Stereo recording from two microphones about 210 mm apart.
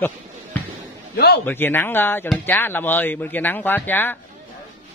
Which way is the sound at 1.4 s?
10° left (ahead or behind).